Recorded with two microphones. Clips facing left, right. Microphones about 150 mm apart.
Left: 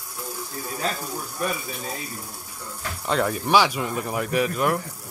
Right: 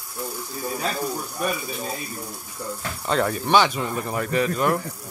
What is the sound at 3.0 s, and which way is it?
A man's voice, centre (ahead or behind).